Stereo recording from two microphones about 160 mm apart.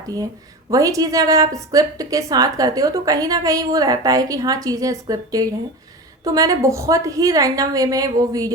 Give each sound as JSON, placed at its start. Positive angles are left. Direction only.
{"t": 0.7, "sound": "a woman's voice", "side_deg": -20}